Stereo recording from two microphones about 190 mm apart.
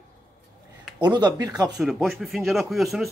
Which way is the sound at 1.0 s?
20° right (ahead or behind).